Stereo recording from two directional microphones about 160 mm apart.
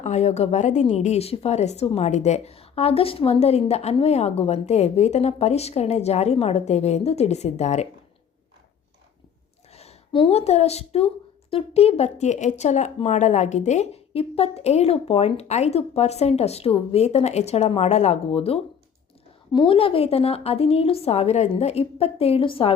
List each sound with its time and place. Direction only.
0.0 s a woman's voice: 45° left (ahead or behind)
9.7 s a woman's voice: 35° left (ahead or behind)